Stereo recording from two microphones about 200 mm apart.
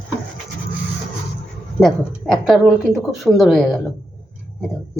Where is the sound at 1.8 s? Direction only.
Centre (ahead or behind).